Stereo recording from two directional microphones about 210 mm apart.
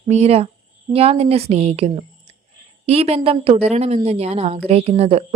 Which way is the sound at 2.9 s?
30° right (ahead or behind).